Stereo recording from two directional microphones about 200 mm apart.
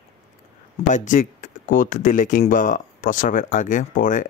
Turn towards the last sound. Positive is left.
turn(degrees=40)  # may be behind; listen again after turning